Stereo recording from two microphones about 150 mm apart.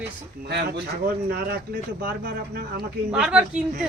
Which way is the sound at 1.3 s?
90° right.